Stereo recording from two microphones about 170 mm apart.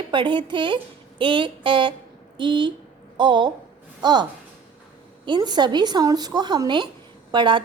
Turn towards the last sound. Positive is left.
turn(degrees=-30)  # may be behind; listen again after turning